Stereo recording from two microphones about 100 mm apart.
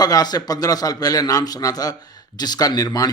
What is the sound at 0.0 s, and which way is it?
A man's voice, 40° left (ahead or behind).